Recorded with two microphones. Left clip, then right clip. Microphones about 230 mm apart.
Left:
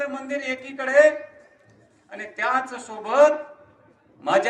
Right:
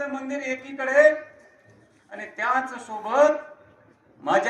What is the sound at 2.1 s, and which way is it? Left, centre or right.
A man's voice, left.